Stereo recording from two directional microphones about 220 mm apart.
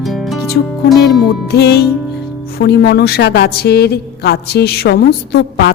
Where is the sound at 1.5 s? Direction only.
45° left (ahead or behind).